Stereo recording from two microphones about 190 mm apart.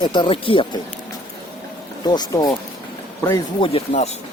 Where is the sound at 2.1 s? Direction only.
20° left (ahead or behind).